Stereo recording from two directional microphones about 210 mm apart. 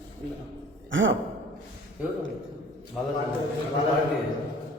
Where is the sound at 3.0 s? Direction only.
Centre (ahead or behind).